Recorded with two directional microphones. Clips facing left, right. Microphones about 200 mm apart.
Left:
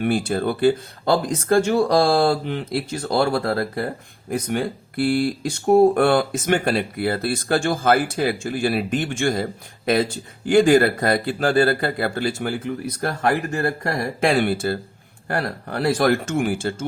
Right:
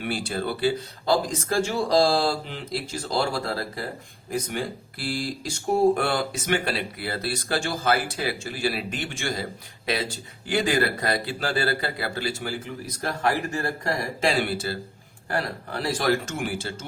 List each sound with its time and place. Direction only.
0.0 s speech: 50° left (ahead or behind)